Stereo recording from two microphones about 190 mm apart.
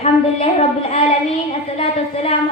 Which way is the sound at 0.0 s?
35° left (ahead or behind).